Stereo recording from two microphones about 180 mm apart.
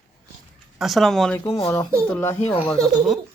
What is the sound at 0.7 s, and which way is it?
Speech, centre (ahead or behind).